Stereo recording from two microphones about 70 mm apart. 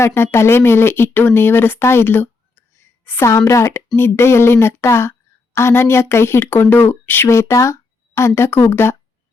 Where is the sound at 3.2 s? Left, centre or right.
Left.